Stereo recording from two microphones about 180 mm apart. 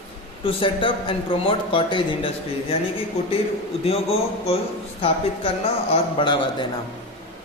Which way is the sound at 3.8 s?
35° left (ahead or behind).